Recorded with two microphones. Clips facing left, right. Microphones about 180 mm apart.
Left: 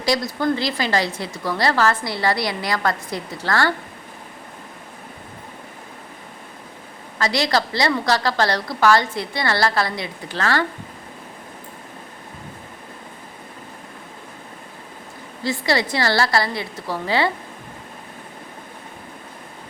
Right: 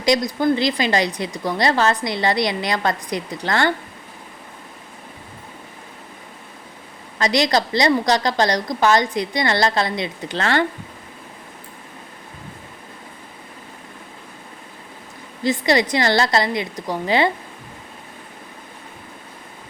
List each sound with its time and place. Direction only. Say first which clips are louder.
0.0 s a woman's voice: right 3 dB; 20° right (ahead or behind)
7.2 s a woman's voice: right 2 dB; 20° right (ahead or behind)
15.4 s a woman's voice: right 3 dB; 20° right (ahead or behind)